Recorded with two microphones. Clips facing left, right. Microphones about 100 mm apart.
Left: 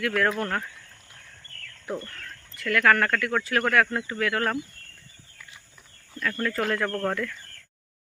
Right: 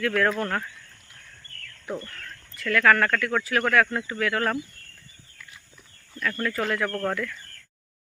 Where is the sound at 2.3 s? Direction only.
20° left (ahead or behind).